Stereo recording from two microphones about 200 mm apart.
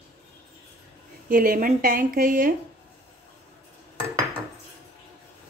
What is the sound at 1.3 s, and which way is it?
Speech, 45° right (ahead or behind).